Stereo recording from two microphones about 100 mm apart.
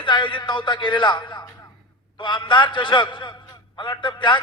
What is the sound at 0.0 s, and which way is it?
A man's voice, 50° left (ahead or behind).